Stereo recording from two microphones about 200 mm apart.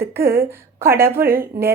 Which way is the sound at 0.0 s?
50° right (ahead or behind).